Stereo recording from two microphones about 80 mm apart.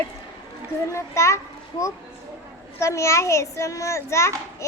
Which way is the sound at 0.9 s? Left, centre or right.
Left.